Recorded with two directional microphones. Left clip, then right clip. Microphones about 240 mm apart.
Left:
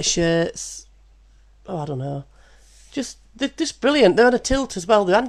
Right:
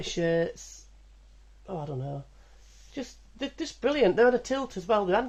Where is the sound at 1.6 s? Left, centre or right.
Left.